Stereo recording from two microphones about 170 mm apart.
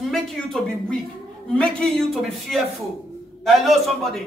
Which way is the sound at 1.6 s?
5° left (ahead or behind).